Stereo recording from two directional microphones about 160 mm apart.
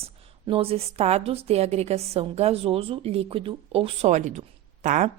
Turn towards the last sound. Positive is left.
turn(degrees=-50)  # may be behind; listen again after turning